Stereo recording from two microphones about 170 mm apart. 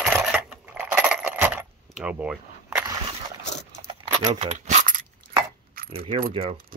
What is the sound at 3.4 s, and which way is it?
Dog, 90° left.